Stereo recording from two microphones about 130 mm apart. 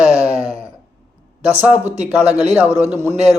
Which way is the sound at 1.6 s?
10° right (ahead or behind).